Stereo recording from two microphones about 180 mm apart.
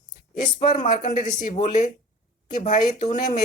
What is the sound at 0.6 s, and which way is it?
Speech, 45° left (ahead or behind).